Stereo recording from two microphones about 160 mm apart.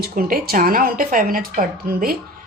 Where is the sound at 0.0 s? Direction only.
65° right (ahead or behind).